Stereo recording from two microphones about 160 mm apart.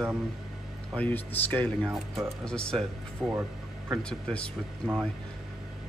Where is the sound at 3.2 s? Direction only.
15° right (ahead or behind).